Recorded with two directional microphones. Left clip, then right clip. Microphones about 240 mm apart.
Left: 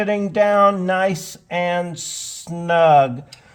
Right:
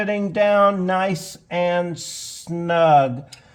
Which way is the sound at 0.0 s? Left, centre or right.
Left.